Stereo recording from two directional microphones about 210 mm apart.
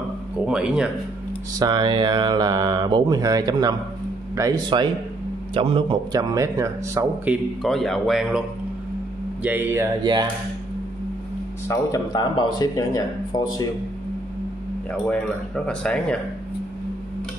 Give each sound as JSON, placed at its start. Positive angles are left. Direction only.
{"t": 0.5, "sound": "speech", "side_deg": -5}
{"t": 1.6, "sound": "a man's voice", "side_deg": -20}
{"t": 7.6, "sound": "a man's voice", "side_deg": 0}
{"t": 11.6, "sound": "speech", "side_deg": 15}
{"t": 14.9, "sound": "speech", "side_deg": 5}